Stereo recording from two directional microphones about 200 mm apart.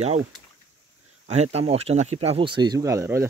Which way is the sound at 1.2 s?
35° right (ahead or behind).